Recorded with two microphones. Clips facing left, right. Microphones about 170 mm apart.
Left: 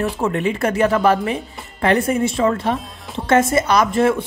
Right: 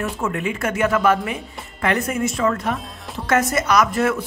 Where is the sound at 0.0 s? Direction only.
35° left (ahead or behind).